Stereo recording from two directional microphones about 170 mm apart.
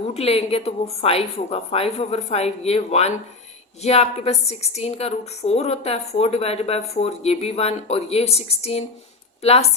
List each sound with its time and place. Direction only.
0.1 s a woman's voice: 35° left (ahead or behind)